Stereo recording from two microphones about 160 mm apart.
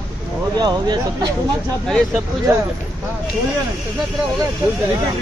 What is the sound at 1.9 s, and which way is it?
Speech, centre (ahead or behind).